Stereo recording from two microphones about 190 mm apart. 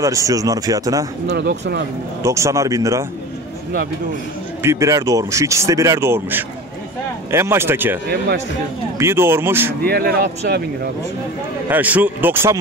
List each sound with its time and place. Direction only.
0.0 s speech: 15° right (ahead or behind)
1.3 s speech: 65° right (ahead or behind)
2.2 s speech: 15° right (ahead or behind)
4.6 s speech: 15° right (ahead or behind)
9.8 s speech: 55° right (ahead or behind)
11.7 s speech: 10° right (ahead or behind)